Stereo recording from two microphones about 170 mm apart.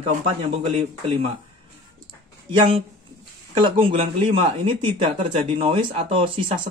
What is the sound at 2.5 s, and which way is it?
Speech, 35° right (ahead or behind).